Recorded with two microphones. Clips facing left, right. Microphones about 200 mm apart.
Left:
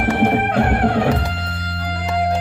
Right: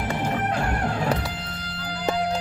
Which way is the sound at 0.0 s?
65° left (ahead or behind).